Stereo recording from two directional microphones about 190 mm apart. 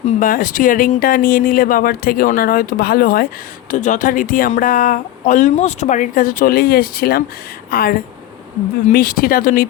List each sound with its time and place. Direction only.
0.0 s speech: 45° left (ahead or behind)
3.7 s speech: 40° left (ahead or behind)